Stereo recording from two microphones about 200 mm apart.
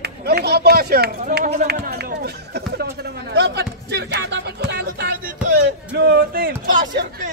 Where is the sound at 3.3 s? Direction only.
55° right (ahead or behind).